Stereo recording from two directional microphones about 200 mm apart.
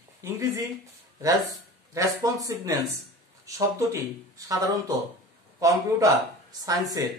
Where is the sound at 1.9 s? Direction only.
15° right (ahead or behind).